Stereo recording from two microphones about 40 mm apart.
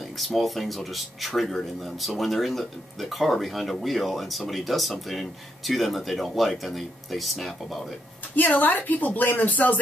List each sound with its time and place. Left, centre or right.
0.4 s speech: centre
8.4 s speech: left